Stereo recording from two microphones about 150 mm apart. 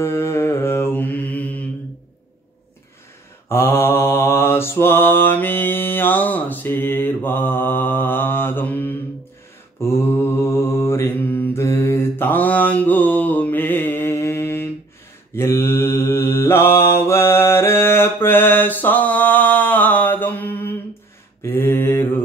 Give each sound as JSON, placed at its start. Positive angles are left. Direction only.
{"t": 0.0, "sound": "mantra", "side_deg": 15}
{"t": 3.4, "sound": "mantra", "side_deg": 15}